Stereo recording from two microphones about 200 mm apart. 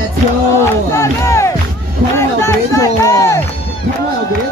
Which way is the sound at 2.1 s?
15° left (ahead or behind).